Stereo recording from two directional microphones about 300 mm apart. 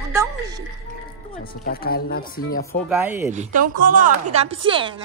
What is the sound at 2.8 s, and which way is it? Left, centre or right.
Speech, centre.